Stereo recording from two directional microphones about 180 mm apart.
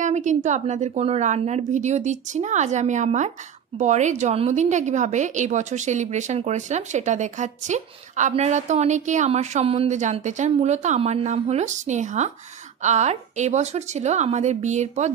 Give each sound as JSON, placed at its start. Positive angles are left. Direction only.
{"t": 0.0, "sound": "a woman's voice", "side_deg": -40}